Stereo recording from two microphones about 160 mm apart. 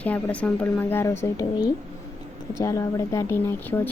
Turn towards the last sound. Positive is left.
turn(degrees=15)  # may be behind; listen again after turning